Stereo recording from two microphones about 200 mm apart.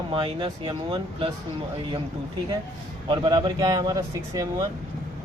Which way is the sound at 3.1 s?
25° right (ahead or behind).